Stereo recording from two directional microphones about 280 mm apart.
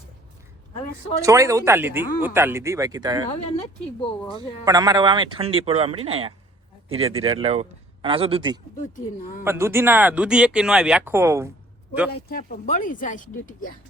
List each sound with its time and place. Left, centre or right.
1.2 s speech: centre
3.6 s speech: centre
4.4 s speech: centre
12.3 s speech: left